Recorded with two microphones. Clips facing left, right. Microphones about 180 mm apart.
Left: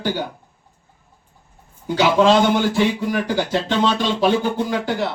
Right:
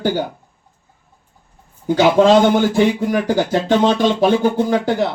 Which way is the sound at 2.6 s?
45° right (ahead or behind).